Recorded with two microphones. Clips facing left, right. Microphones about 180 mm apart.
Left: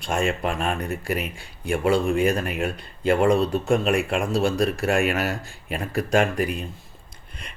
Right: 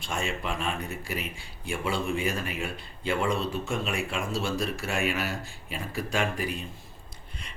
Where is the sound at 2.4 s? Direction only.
55° left (ahead or behind).